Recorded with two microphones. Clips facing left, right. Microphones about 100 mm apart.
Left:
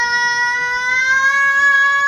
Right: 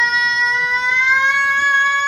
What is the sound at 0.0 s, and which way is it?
Vehicle, 30° left (ahead or behind).